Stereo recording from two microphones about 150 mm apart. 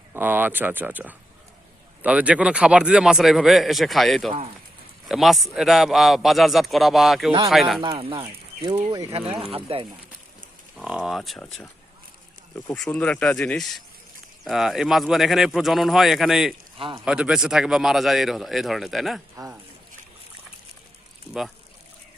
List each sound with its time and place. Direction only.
0.1 s a man's voice: 15° right (ahead or behind)
7.9 s speech: 35° right (ahead or behind)
8.7 s speech: 20° right (ahead or behind)
9.7 s speech: 40° right (ahead or behind)
10.8 s a man's voice: 5° right (ahead or behind)
12.6 s a man's voice: 5° left (ahead or behind)
16.7 s speech: 35° right (ahead or behind)
17.1 s a man's voice: 5° right (ahead or behind)
21.3 s speech: 40° right (ahead or behind)